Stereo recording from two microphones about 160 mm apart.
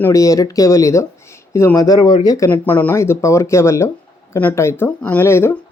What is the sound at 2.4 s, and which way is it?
Speech, 10° left (ahead or behind).